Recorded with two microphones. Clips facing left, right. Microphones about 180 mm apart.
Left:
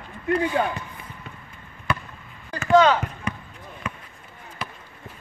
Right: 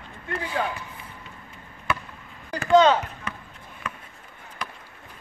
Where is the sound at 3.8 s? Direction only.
10° left (ahead or behind).